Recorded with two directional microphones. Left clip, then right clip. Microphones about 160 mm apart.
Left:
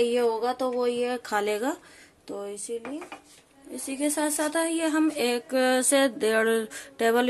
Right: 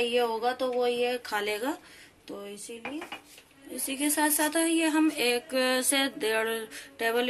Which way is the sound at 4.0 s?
70° left (ahead or behind).